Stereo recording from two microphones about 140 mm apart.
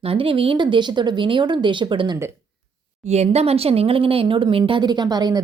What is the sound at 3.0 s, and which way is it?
Speech, 50° right (ahead or behind).